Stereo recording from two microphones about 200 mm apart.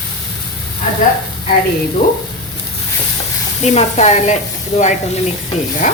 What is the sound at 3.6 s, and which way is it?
A woman's voice, 35° left (ahead or behind).